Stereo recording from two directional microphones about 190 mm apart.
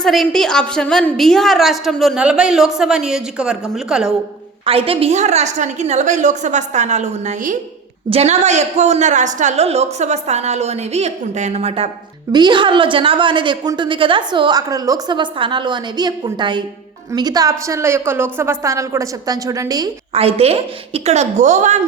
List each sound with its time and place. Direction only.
0.0 s a woman's voice: centre (ahead or behind)
4.6 s a woman's voice: 30° right (ahead or behind)
12.3 s a woman's voice: 25° right (ahead or behind)
20.1 s a woman's voice: 30° right (ahead or behind)